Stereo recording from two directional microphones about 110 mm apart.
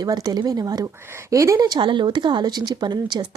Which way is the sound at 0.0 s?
40° right (ahead or behind).